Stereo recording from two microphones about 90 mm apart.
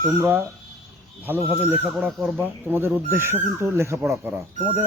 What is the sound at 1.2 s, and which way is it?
Speech, 20° right (ahead or behind).